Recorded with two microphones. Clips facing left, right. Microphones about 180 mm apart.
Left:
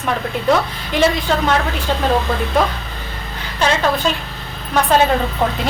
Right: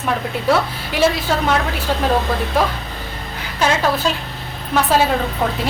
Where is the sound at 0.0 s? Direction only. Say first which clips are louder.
Left 1 dB; 5° right (ahead or behind).